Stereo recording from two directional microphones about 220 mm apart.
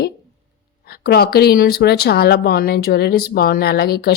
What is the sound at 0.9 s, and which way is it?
A woman's voice, 45° left (ahead or behind).